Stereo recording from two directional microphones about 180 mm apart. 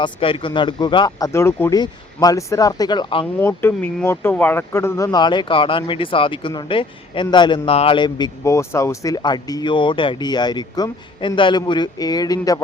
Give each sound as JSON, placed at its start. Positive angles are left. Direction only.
{"t": 0.0, "sound": "speech", "side_deg": 30}
{"t": 3.4, "sound": "speech", "side_deg": 10}